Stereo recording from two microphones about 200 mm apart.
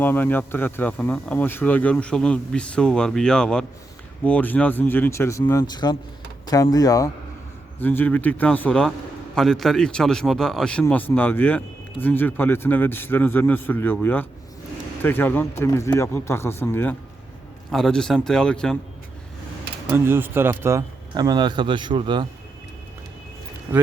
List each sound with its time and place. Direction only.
0.0 s speech: 10° left (ahead or behind)
19.9 s speech: 10° right (ahead or behind)